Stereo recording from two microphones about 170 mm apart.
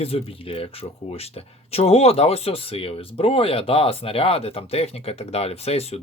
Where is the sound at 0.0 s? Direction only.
35° left (ahead or behind).